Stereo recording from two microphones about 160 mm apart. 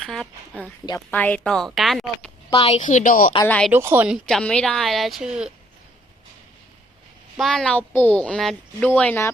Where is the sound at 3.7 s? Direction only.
15° right (ahead or behind).